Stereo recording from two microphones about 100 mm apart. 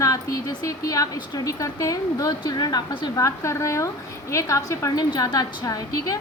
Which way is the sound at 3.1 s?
30° left (ahead or behind).